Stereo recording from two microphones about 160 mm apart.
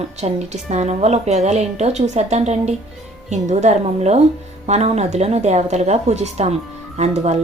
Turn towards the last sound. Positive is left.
turn(degrees=-45)  # may be behind; listen again after turning